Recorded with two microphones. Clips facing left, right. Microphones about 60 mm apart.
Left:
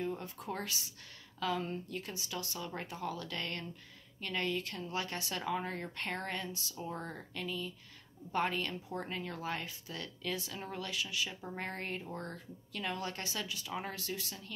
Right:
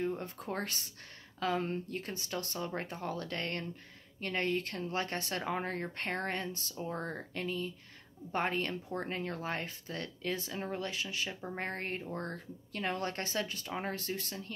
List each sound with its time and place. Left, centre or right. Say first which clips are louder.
0.0 s speech: right 3 dB; right